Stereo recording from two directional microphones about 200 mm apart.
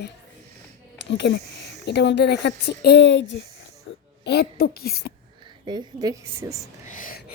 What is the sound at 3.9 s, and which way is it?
Music, 75° left (ahead or behind).